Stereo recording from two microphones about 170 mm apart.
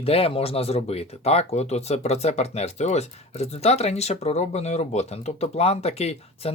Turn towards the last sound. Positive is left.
turn(degrees=35)  # may be behind; listen again after turning